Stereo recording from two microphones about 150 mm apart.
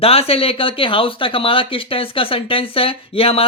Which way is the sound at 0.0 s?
40° left (ahead or behind).